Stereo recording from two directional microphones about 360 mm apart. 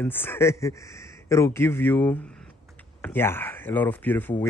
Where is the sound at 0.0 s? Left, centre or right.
Centre.